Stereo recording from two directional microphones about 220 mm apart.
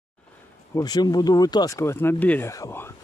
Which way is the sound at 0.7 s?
20° left (ahead or behind).